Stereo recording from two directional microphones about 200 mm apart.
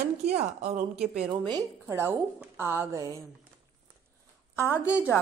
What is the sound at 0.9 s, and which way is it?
Speech, 5° right (ahead or behind).